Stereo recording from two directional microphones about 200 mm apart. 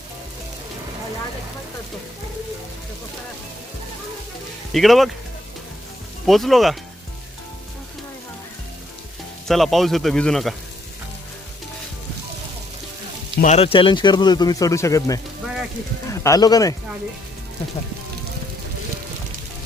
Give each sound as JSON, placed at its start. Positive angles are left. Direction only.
{"t": 4.7, "sound": "a man's voice", "side_deg": 0}
{"t": 6.2, "sound": "a man's voice", "side_deg": 0}
{"t": 9.5, "sound": "a man's voice", "side_deg": 0}
{"t": 13.4, "sound": "speech", "side_deg": 30}
{"t": 16.2, "sound": "speech", "side_deg": 20}